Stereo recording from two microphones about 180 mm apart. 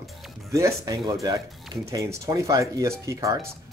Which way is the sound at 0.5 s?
15° right (ahead or behind).